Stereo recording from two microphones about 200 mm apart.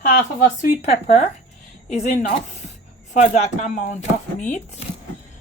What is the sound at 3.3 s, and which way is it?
Speech, 35° left (ahead or behind).